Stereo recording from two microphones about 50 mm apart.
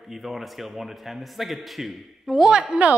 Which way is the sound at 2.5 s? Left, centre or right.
Right.